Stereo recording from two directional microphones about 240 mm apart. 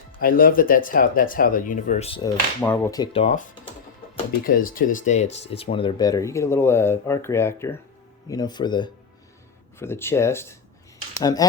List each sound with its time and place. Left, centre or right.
0.2 s speech: left
4.4 s speech: left; by 11.4 s centre